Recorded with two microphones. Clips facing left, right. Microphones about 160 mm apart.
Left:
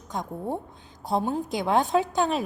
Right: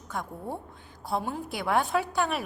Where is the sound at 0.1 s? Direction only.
20° left (ahead or behind).